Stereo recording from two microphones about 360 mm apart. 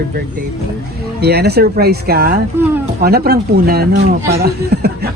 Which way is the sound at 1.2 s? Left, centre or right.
Right.